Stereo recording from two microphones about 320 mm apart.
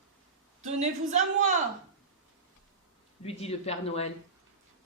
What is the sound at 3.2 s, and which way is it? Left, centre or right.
Speech, centre.